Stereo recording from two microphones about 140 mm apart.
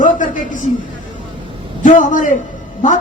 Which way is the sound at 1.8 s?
65° left (ahead or behind).